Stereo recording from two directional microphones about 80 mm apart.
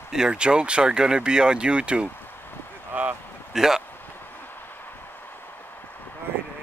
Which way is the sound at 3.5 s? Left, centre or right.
Centre.